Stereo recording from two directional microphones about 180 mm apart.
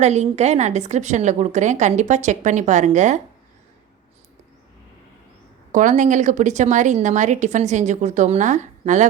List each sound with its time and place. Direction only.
0.0 s a woman's voice: 40° right (ahead or behind)
5.7 s a woman's voice: 45° right (ahead or behind)